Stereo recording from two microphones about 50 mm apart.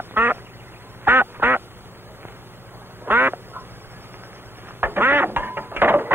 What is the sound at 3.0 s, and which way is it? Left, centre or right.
Duck, right.